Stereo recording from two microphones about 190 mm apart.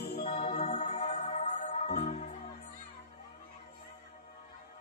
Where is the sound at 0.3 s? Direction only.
30° left (ahead or behind).